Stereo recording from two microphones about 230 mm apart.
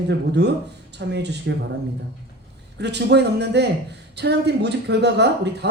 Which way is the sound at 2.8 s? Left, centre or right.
Right.